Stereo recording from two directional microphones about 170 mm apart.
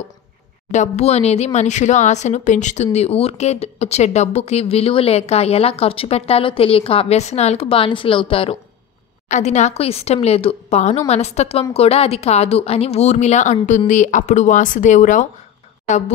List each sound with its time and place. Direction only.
0.7 s speech: 45° left (ahead or behind)
9.3 s a woman's voice: 45° left (ahead or behind)